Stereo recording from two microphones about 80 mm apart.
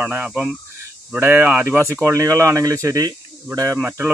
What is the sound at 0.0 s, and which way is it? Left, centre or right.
Speech, right.